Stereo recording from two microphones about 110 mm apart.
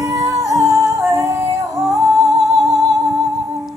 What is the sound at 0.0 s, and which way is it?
Music, 30° right (ahead or behind).